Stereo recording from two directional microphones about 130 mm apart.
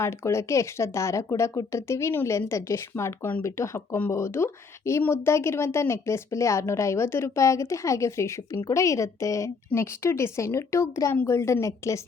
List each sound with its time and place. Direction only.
0.0 s speech: 20° left (ahead or behind)